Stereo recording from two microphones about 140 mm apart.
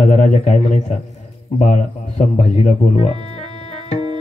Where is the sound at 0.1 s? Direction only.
60° left (ahead or behind).